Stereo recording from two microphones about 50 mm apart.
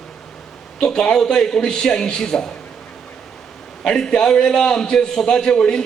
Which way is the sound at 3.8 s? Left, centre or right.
Centre.